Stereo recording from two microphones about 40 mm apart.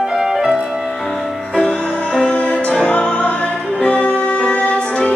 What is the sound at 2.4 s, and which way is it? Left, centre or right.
Music, left.